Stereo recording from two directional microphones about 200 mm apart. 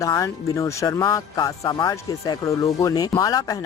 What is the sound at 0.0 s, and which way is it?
Speech, 15° left (ahead or behind).